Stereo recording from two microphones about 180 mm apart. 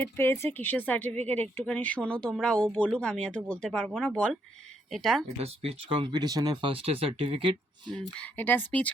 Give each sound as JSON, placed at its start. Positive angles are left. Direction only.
{"t": 0.0, "sound": "speech", "side_deg": 15}
{"t": 5.4, "sound": "speech", "side_deg": -35}
{"t": 8.2, "sound": "speech", "side_deg": 10}